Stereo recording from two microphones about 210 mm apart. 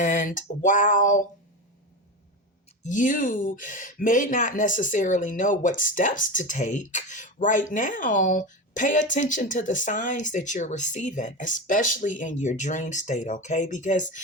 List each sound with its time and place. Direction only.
0.0 s speech: 40° left (ahead or behind)
2.8 s speech: 40° left (ahead or behind)